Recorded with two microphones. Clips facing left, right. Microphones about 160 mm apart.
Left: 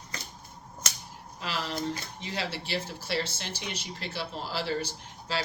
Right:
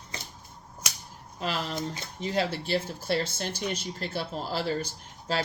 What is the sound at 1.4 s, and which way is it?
Speech, 45° right (ahead or behind).